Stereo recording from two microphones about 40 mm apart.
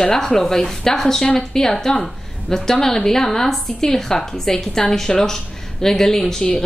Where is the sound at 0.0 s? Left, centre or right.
Centre.